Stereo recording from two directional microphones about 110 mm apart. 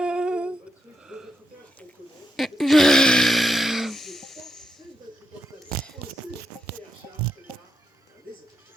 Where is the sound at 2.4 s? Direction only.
Centre (ahead or behind).